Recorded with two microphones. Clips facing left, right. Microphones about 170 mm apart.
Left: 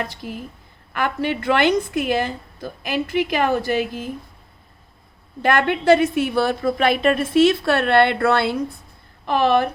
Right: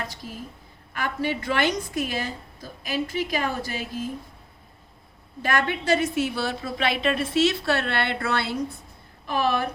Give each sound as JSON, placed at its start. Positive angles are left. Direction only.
{"t": 0.9, "sound": "a woman's voice", "side_deg": 65}
{"t": 5.4, "sound": "a woman's voice", "side_deg": 60}